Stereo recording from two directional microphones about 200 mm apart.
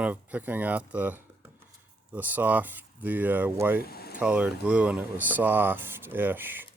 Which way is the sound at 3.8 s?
50° left (ahead or behind).